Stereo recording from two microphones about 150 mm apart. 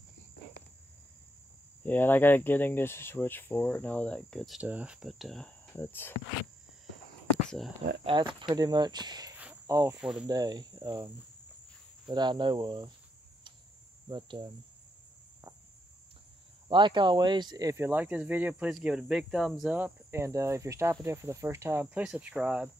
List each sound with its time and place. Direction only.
1.8 s speech: 10° left (ahead or behind)
5.7 s insect: 15° left (ahead or behind)
8.0 s speech: 35° right (ahead or behind)
9.7 s cricket: 20° right (ahead or behind)
9.9 s speech: 5° right (ahead or behind)
10.2 s speech: 25° right (ahead or behind)
12.1 s cricket: 30° right (ahead or behind)
14.0 s cricket: 30° right (ahead or behind)
16.6 s speech: 30° right (ahead or behind); by 22.7 s 10° right (ahead or behind)